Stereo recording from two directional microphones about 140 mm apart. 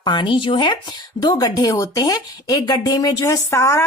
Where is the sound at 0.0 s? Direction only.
35° left (ahead or behind).